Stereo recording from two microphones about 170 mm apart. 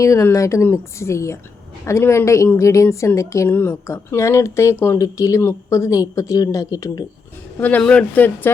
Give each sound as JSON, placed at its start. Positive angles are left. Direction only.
{"t": 0.0, "sound": "a woman's voice", "side_deg": 15}
{"t": 7.6, "sound": "a woman's voice", "side_deg": 5}